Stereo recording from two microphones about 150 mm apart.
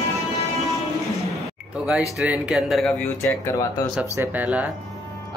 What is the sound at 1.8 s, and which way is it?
Speech, 5° right (ahead or behind).